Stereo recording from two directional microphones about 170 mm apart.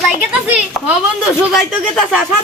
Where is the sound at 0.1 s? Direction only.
10° right (ahead or behind).